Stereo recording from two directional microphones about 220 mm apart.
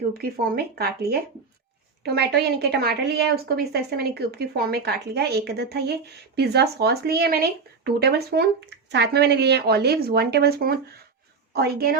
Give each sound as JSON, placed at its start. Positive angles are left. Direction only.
{"t": 0.2, "sound": "a woman's voice", "side_deg": -40}